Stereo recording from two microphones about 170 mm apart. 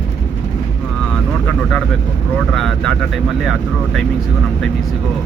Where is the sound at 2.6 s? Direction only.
Centre (ahead or behind).